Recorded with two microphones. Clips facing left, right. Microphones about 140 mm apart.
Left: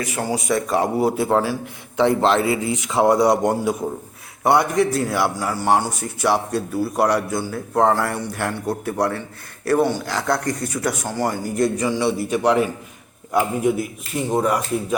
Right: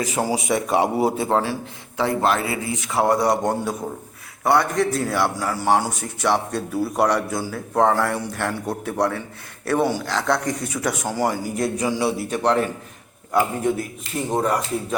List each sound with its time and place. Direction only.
0.2 s speech: 10° right (ahead or behind)
0.9 s a man's voice: centre (ahead or behind)
2.0 s a man's voice: 20° left (ahead or behind); by 12.3 s 5° right (ahead or behind)
12.3 s speech: 10° left (ahead or behind)